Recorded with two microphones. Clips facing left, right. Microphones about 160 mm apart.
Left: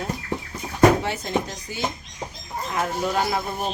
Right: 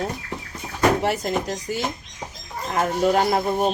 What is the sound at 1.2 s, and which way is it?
Speech, 40° right (ahead or behind).